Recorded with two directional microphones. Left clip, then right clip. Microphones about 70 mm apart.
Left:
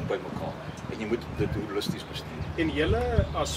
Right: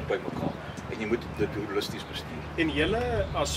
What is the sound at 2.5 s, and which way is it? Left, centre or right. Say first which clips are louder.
Speech: even; centre.